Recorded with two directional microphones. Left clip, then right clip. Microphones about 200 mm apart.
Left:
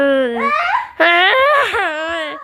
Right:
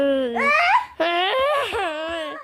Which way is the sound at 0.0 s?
5° right (ahead or behind).